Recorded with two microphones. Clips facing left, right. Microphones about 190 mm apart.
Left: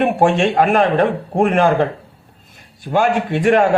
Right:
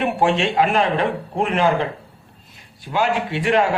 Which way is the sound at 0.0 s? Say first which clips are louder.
Left 4 dB; 50° left (ahead or behind).